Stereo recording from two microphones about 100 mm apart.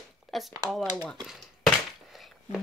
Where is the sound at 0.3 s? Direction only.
Centre (ahead or behind).